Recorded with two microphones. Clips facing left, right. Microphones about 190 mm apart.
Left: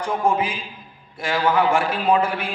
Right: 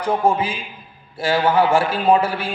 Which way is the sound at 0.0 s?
35° right (ahead or behind).